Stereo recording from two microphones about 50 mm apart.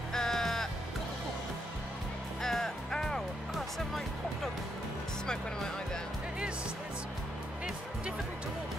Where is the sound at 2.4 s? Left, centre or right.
Centre.